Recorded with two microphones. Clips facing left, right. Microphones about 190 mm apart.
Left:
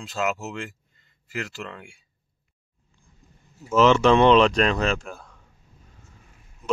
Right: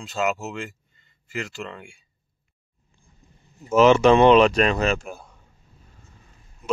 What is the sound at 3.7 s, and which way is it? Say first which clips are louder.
Speech: right 2 dB; 15° right (ahead or behind).